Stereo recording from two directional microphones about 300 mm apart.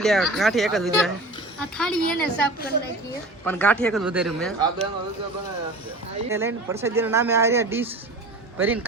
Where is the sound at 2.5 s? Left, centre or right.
Left.